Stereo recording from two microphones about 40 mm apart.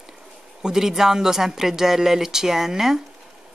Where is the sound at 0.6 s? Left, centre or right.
Centre.